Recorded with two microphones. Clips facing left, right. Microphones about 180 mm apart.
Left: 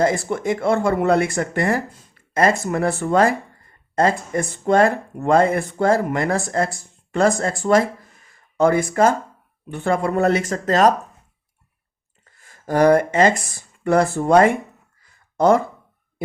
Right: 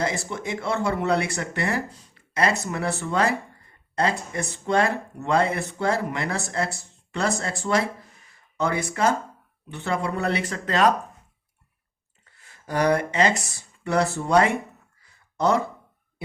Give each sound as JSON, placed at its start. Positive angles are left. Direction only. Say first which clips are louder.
{"t": 0.0, "sound": "speech", "louder": "left 8 dB", "side_deg": 50}
{"t": 12.2, "sound": "speech", "louder": "left 9 dB", "side_deg": 45}